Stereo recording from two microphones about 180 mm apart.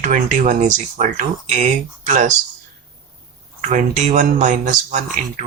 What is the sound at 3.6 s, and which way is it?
Speech, 45° right (ahead or behind).